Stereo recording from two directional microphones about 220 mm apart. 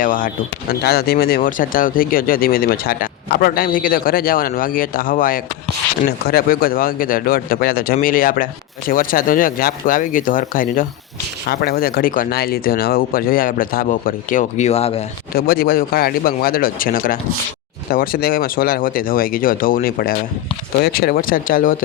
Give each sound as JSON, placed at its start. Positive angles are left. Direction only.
{"t": 0.0, "sound": "speech", "side_deg": 40}
{"t": 15.3, "sound": "speech", "side_deg": 45}